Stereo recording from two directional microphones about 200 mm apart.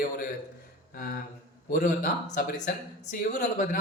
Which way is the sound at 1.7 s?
45° left (ahead or behind).